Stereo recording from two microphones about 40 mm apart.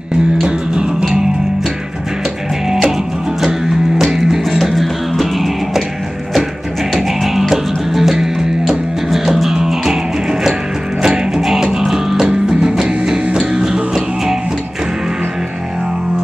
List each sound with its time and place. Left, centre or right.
4.0 s music: centre
6.9 s music: centre
11.0 s music: centre